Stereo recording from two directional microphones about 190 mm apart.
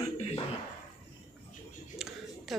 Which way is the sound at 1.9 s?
Centre (ahead or behind).